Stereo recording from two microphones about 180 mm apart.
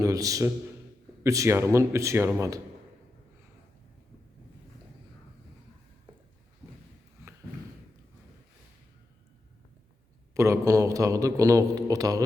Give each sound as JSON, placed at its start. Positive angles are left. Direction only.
{"t": 0.0, "sound": "a man's voice", "side_deg": -20}
{"t": 10.3, "sound": "a man's voice", "side_deg": -15}